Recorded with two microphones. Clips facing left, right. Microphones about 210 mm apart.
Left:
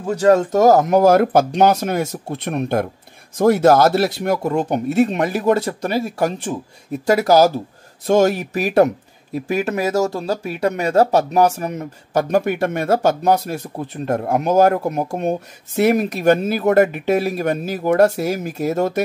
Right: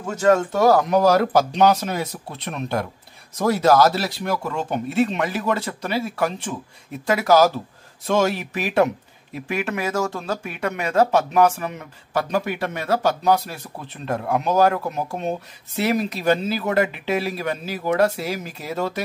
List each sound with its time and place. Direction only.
0.0 s speech: 35° left (ahead or behind); by 4.4 s 55° left (ahead or behind)
4.4 s speech: 40° left (ahead or behind)